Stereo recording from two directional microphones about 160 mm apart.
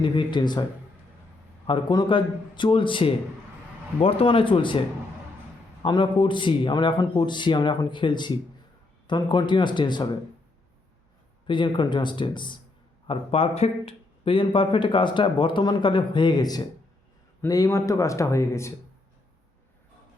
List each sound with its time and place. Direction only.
0.0 s a man's voice: 30° left (ahead or behind)
1.6 s speech: 30° left (ahead or behind)
5.8 s a man's voice: 30° left (ahead or behind)
11.4 s a man's voice: 30° left (ahead or behind)